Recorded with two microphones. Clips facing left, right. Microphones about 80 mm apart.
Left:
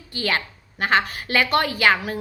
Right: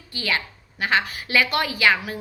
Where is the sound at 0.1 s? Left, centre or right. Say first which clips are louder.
Left 2 dB; left.